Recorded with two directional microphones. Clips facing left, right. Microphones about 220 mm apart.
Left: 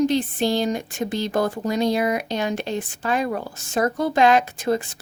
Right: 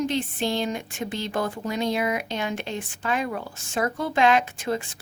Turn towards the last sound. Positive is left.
turn(degrees=40)  # may be behind; listen again after turning